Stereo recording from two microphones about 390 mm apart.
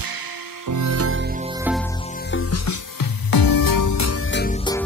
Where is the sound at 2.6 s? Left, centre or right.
Left.